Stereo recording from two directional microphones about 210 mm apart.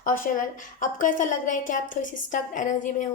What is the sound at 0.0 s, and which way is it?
A woman's voice, 40° left (ahead or behind).